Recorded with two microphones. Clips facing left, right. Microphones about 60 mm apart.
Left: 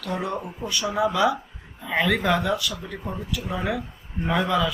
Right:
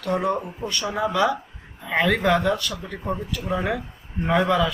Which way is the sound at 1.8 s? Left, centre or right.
Centre.